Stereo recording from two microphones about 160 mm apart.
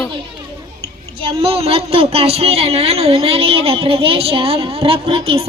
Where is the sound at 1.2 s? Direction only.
40° right (ahead or behind).